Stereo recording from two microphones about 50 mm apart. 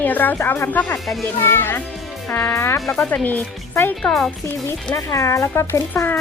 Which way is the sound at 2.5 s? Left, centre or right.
Left.